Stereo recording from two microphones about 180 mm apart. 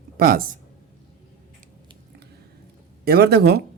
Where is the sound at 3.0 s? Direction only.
60° right (ahead or behind).